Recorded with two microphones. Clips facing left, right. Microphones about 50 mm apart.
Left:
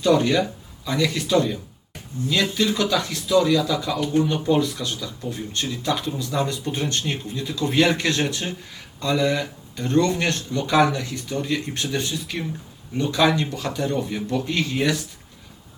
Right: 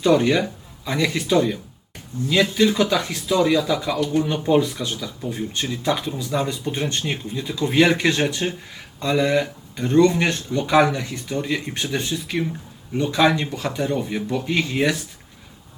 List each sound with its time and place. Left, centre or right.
0.0 s speech: right
5.3 s speech: right
14.7 s speech: right